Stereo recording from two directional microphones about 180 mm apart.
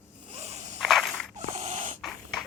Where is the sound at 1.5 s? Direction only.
40° right (ahead or behind).